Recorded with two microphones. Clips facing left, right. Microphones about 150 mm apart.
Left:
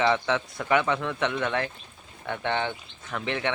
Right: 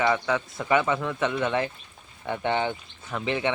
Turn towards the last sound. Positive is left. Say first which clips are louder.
# right 2 dB
turn(degrees=-15)  # may be behind; listen again after turning